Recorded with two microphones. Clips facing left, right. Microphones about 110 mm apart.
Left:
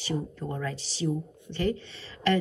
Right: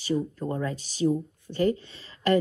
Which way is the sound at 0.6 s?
35° right (ahead or behind).